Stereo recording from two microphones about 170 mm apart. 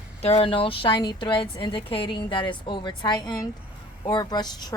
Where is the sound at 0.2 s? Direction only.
35° left (ahead or behind).